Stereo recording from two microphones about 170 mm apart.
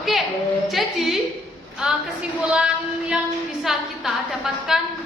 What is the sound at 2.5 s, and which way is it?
Child singing, 5° right (ahead or behind).